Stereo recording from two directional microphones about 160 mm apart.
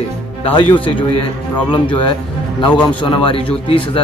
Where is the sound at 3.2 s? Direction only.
35° left (ahead or behind).